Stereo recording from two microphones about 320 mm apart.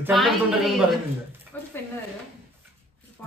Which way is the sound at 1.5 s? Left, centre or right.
Centre.